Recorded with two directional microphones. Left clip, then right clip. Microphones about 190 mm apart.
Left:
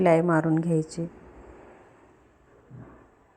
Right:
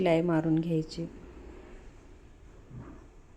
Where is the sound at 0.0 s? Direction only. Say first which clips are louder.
Left 6 dB; 10° left (ahead or behind).